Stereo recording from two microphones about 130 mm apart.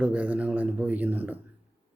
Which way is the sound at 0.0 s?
10° right (ahead or behind).